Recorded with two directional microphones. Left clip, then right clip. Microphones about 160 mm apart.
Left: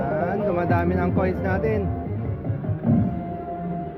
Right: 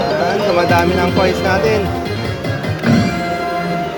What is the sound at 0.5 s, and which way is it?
Speech, 10° right (ahead or behind).